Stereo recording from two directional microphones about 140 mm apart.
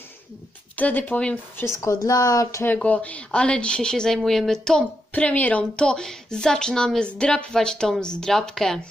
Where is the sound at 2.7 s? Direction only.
10° left (ahead or behind).